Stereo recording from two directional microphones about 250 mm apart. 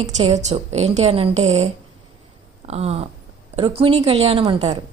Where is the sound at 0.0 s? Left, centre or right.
Right.